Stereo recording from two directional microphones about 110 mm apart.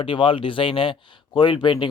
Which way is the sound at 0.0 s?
50° left (ahead or behind).